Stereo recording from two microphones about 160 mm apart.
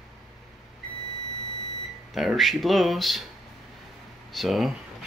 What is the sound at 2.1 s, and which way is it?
Speech, centre (ahead or behind).